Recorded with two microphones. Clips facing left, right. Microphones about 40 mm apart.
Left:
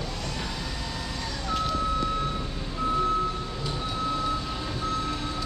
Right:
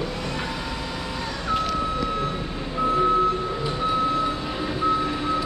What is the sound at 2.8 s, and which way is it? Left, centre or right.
Reversing beeps, right.